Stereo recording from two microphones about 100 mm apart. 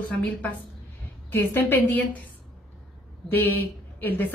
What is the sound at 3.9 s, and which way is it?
Speech, 20° left (ahead or behind).